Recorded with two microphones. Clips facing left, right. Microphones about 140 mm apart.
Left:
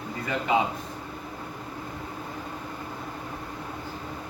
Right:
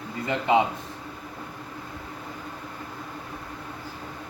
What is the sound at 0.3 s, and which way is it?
Speech, 20° right (ahead or behind).